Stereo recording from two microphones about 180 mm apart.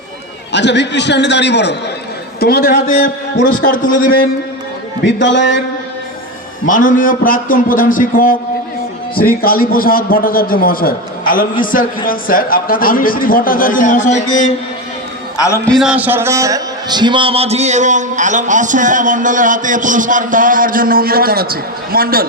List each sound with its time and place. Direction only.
0.5 s a man's voice: 75° left (ahead or behind)
2.4 s a man's voice: 60° left (ahead or behind)
5.0 s a man's voice: 85° left
6.7 s a man's voice: 50° left (ahead or behind)
15.4 s a man's voice: 15° left (ahead or behind)
15.7 s a man's voice: 5° right (ahead or behind); by 22.3 s 55° right (ahead or behind)